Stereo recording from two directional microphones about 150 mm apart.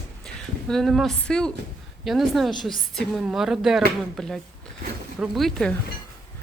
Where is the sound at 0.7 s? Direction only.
Centre (ahead or behind).